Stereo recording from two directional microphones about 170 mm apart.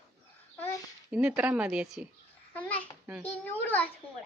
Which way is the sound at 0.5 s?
15° left (ahead or behind).